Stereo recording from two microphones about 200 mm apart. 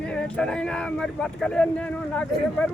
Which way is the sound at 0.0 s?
5° left (ahead or behind).